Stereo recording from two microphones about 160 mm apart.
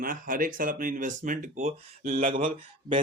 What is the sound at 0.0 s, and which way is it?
Speech, 60° right (ahead or behind).